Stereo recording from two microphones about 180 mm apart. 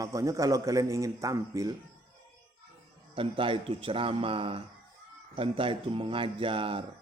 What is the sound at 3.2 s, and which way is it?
Speech, 30° right (ahead or behind).